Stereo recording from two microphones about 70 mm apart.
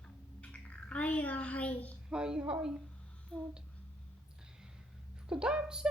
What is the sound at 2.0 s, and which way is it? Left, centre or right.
Speech, centre.